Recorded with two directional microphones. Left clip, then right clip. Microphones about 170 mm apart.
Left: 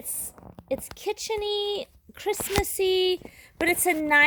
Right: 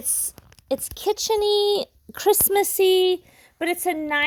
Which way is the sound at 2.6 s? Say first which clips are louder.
Right 6 dB; 30° right (ahead or behind).